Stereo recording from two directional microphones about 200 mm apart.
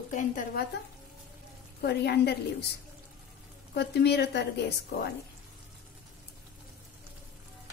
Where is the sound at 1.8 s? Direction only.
55° left (ahead or behind).